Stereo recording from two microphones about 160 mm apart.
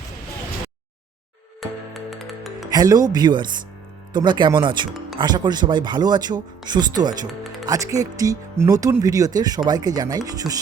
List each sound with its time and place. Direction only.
1.6 s music: centre (ahead or behind)
2.6 s speech: 25° right (ahead or behind)